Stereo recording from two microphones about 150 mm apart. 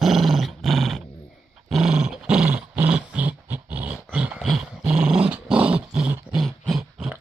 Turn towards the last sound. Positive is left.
turn(degrees=-5)  # may be behind; listen again after turning